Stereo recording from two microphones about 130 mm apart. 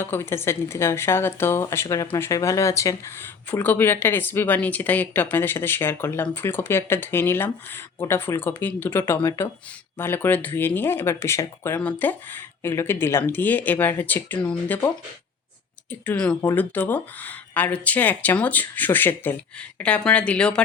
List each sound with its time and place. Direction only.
0.0 s a woman's voice: 20° left (ahead or behind)
15.9 s speech: 10° left (ahead or behind)